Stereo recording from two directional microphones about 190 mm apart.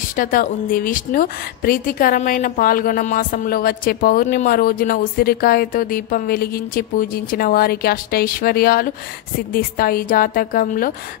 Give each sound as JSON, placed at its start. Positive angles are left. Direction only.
{"t": 0.2, "sound": "a woman's voice", "side_deg": 45}